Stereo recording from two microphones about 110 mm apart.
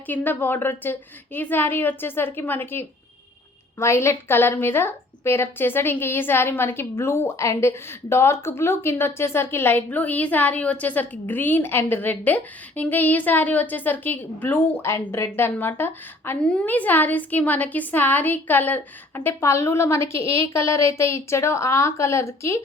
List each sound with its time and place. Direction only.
0.1 s a woman's voice: 15° left (ahead or behind)